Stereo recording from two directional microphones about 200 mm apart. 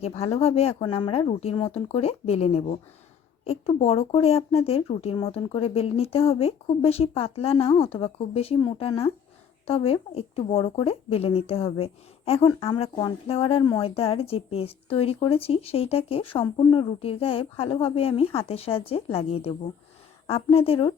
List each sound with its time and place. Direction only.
0.0 s speech: 30° left (ahead or behind)